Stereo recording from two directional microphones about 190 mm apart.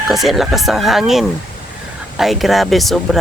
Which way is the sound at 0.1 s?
Centre (ahead or behind).